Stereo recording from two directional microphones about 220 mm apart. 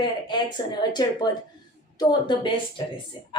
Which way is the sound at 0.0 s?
20° left (ahead or behind).